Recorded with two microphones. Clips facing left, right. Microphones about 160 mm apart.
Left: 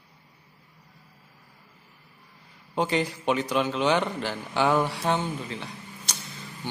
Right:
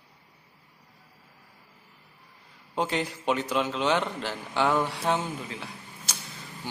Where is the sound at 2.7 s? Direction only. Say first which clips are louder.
Left 3 dB; centre (ahead or behind).